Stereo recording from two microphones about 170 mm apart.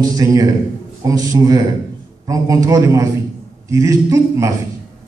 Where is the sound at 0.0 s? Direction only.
20° right (ahead or behind).